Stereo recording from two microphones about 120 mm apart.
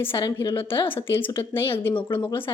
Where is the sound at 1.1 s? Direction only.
45° left (ahead or behind).